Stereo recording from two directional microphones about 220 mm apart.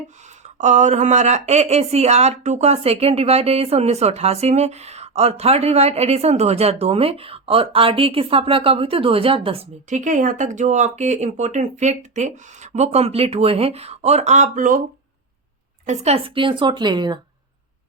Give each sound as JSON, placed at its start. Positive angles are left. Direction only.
{"t": 0.6, "sound": "speech", "side_deg": -35}
{"t": 15.9, "sound": "speech", "side_deg": -25}